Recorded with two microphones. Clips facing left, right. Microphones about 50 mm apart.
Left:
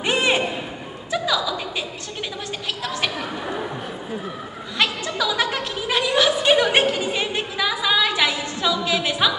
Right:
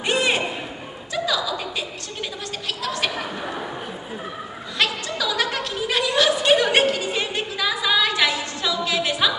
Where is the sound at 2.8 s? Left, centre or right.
Centre.